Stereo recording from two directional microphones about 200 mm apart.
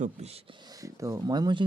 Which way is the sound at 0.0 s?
30° right (ahead or behind).